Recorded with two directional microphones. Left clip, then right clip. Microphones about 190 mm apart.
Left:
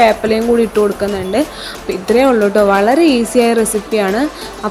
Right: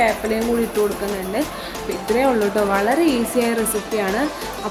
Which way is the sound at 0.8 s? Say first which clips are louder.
Left 5 dB; centre (ahead or behind).